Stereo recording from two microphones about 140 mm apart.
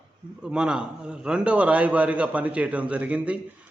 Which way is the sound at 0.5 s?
5° right (ahead or behind).